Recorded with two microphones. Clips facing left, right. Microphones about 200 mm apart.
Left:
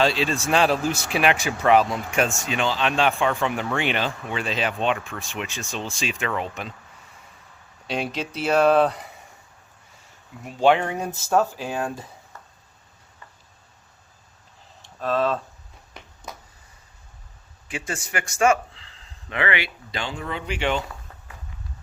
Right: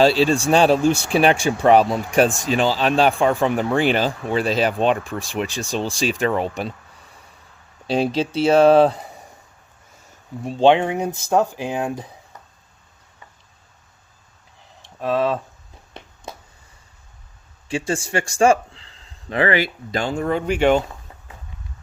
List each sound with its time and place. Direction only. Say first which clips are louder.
0.0 s speech: right 6 dB; 35° right (ahead or behind)
7.9 s speech: right 8 dB; 30° right (ahead or behind)
10.4 s speech: right 4 dB; 25° right (ahead or behind)
14.9 s speech: right 3 dB; 15° right (ahead or behind)
16.3 s a sound: right 3 dB; 30° right (ahead or behind)
17.7 s speech: right 8 dB; 30° right (ahead or behind); by 20.8 s 45° right (ahead or behind)